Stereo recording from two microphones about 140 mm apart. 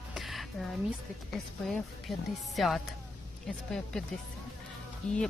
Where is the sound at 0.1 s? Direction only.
Centre (ahead or behind).